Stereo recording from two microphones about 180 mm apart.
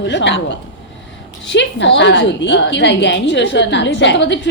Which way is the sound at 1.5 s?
85° left.